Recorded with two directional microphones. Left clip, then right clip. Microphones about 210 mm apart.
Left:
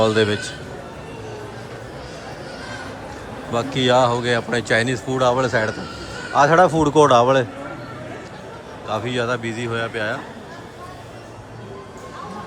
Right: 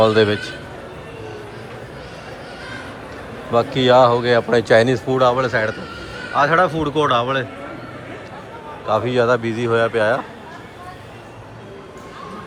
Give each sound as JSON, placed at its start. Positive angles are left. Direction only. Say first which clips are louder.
{"t": 0.0, "sound": "speech", "louder": "right 3 dB", "side_deg": 10}
{"t": 3.5, "sound": "speech", "louder": "right 4 dB", "side_deg": 10}
{"t": 8.9, "sound": "speech", "louder": "right 6 dB", "side_deg": 5}